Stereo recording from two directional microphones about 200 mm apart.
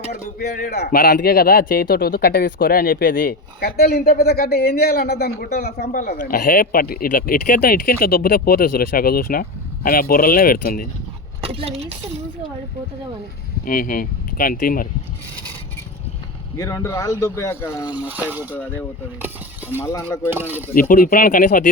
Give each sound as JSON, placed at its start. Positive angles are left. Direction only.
{"t": 0.3, "sound": "a man's voice", "side_deg": 50}
{"t": 11.3, "sound": "a woman's voice", "side_deg": -30}
{"t": 13.7, "sound": "a man's voice", "side_deg": 45}
{"t": 16.6, "sound": "speech", "side_deg": 15}
{"t": 18.0, "sound": "speech", "side_deg": -10}
{"t": 19.8, "sound": "speech", "side_deg": 15}
{"t": 20.3, "sound": "speech", "side_deg": -10}
{"t": 20.7, "sound": "a man's voice", "side_deg": 45}